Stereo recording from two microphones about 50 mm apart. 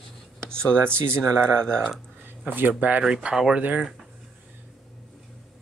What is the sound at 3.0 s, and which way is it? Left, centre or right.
Speech, centre.